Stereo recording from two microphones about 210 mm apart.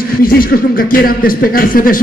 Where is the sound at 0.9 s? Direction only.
45° left (ahead or behind).